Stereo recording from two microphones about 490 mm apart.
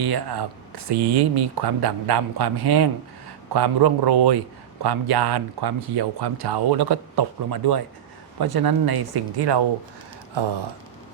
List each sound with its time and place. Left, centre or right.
0.0 s speech: right